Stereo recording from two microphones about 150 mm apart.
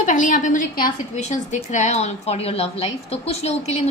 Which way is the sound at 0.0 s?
60° left (ahead or behind).